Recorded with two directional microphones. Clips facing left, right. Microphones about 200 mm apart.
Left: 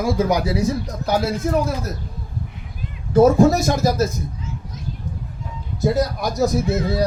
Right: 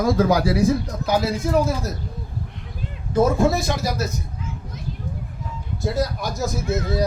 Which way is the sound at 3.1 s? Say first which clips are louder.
Left 5 dB; 40° left (ahead or behind).